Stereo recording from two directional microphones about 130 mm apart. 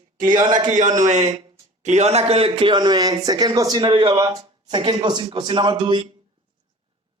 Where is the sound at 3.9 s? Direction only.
45° right (ahead or behind).